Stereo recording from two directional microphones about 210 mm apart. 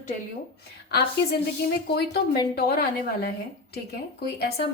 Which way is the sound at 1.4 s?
50° left (ahead or behind).